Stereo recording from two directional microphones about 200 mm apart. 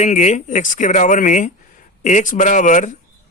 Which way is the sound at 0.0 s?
35° left (ahead or behind).